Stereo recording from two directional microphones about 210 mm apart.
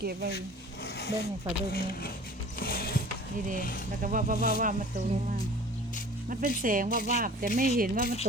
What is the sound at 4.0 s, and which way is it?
Speech, 40° right (ahead or behind).